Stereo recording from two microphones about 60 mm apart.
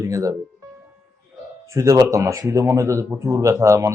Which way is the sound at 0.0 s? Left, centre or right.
Right.